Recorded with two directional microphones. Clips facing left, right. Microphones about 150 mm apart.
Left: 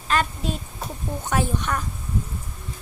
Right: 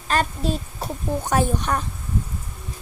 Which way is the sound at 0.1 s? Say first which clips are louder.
Right 2 dB; 35° right (ahead or behind).